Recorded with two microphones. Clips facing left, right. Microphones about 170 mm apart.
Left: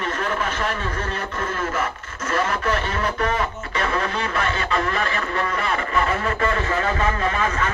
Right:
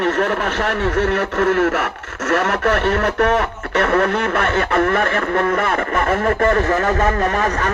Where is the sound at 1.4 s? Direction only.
70° right (ahead or behind).